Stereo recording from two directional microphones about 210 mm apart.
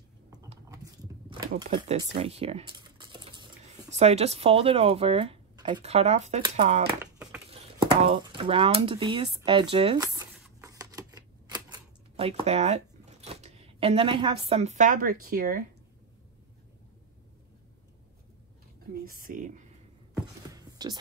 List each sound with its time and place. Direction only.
0.7 s a sound: 15° right (ahead or behind)
2.0 s typing: 25° right (ahead or behind)
5.8 s speech: 30° right (ahead or behind)
10.6 s typewriter: 15° right (ahead or behind); by 15.6 s 45° right (ahead or behind)
19.0 s speech: 40° right (ahead or behind)
20.4 s music: 20° right (ahead or behind)